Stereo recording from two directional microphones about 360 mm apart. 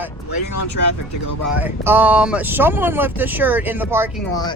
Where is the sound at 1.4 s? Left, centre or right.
Centre.